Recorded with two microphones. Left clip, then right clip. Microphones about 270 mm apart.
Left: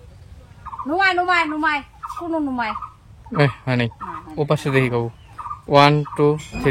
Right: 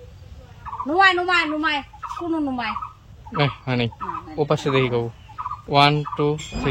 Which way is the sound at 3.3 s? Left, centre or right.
Centre.